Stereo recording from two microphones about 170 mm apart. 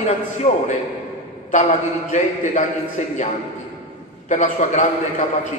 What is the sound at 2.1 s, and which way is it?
Speech, 45° left (ahead or behind).